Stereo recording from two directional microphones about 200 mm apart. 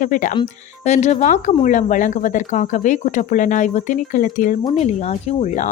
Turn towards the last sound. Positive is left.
turn(degrees=35)  # may be behind; listen again after turning